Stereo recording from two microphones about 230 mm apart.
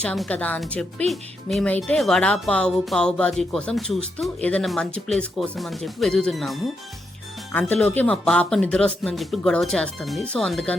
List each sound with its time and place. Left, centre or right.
0.0 s speech: centre